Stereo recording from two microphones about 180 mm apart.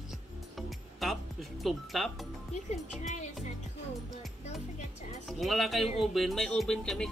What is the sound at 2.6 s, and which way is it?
Speech, 45° left (ahead or behind).